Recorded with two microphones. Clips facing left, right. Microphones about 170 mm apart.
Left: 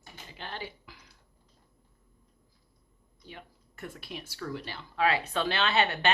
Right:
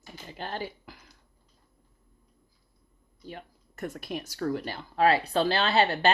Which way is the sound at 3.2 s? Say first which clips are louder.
Right 6 dB; 45° right (ahead or behind).